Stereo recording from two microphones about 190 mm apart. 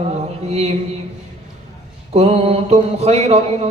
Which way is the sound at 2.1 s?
35° right (ahead or behind).